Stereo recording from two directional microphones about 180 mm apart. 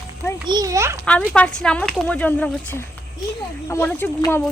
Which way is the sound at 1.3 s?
5° left (ahead or behind).